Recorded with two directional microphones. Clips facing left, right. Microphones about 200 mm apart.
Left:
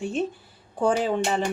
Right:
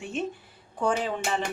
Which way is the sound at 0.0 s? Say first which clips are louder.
Left 4 dB; 35° left (ahead or behind).